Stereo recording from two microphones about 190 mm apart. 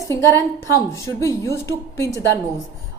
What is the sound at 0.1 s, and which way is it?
A woman's voice, 15° left (ahead or behind).